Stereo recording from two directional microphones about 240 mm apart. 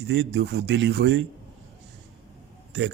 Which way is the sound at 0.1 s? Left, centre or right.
Right.